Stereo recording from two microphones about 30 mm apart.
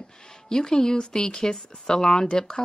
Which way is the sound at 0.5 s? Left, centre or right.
Left.